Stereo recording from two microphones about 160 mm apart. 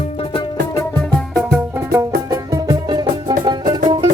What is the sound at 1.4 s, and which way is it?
Music, centre (ahead or behind).